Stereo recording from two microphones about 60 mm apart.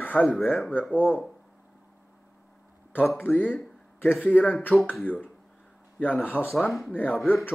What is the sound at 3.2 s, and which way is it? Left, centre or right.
Speech, left.